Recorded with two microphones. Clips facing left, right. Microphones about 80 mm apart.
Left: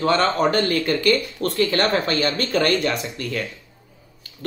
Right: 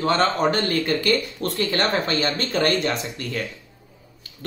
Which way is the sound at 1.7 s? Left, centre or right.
Left.